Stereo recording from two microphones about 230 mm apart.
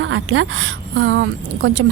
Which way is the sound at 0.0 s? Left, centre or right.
Right.